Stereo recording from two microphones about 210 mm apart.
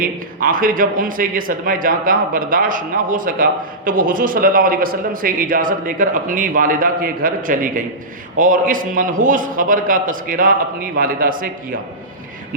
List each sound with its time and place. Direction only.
0.0 s a man's voice: 40° right (ahead or behind)